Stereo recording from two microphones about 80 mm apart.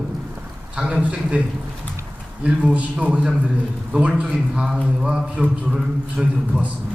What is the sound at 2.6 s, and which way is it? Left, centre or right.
A man's voice, centre.